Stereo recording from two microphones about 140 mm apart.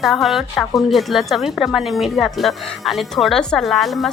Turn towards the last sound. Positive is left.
turn(degrees=0)  # may be behind; listen again after turning